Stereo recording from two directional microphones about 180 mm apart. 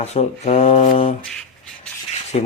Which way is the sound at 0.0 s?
35° left (ahead or behind).